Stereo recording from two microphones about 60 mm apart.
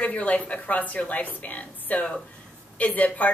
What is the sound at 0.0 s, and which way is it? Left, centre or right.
A woman's voice, left.